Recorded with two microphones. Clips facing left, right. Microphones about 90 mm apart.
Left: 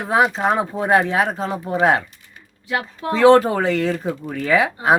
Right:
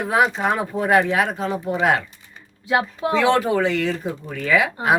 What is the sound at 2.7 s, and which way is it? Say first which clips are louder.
Speech: right 3 dB; 20° right (ahead or behind).